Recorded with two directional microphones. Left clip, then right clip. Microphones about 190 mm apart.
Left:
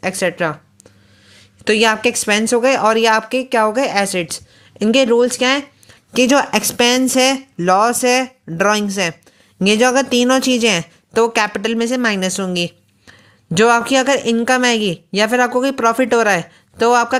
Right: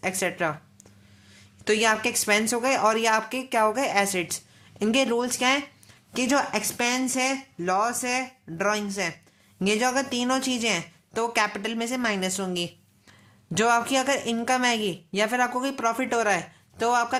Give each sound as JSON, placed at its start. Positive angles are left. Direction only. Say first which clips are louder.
{"t": 0.0, "sound": "speech", "louder": "left 8 dB", "side_deg": 25}